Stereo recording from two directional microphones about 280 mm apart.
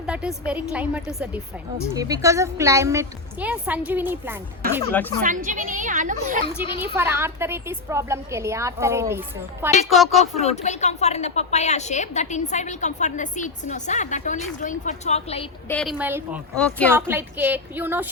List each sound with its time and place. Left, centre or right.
0.0 s a woman's voice: centre
4.9 s speech: centre
5.2 s a woman's voice: right
6.9 s a woman's voice: centre
10.2 s a woman's voice: left
15.7 s a woman's voice: centre
16.6 s a woman's voice: centre
16.9 s a woman's voice: centre